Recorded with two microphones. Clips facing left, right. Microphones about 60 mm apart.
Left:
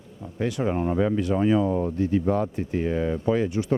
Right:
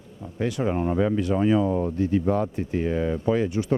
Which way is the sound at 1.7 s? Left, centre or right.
Right.